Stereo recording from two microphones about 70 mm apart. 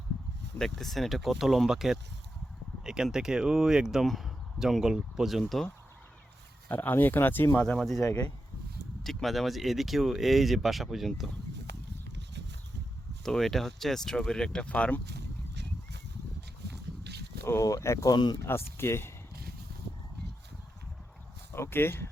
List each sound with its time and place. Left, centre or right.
0.6 s speech: centre
6.7 s speech: left
7.6 s speech: centre
9.0 s speech: centre
13.2 s speech: centre
17.4 s speech: left
18.1 s speech: left
18.4 s speech: left
21.5 s speech: left